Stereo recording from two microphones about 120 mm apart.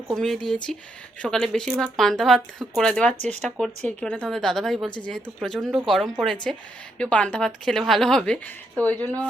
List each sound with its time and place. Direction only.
0.1 s a woman's voice: 5° left (ahead or behind)
9.0 s speech: 30° right (ahead or behind)